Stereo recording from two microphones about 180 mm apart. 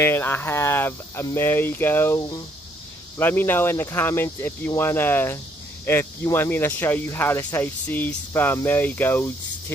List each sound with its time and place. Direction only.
0.0 s speech: 15° left (ahead or behind)